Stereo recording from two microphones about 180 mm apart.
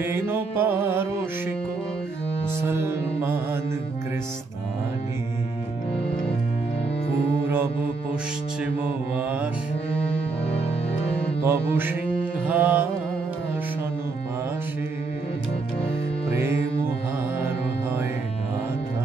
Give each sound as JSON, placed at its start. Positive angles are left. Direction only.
{"t": 0.0, "sound": "mantra", "side_deg": -10}
{"t": 2.6, "sound": "mantra", "side_deg": -15}
{"t": 7.4, "sound": "music", "side_deg": -15}
{"t": 11.4, "sound": "mantra", "side_deg": -15}
{"t": 16.3, "sound": "music", "side_deg": -15}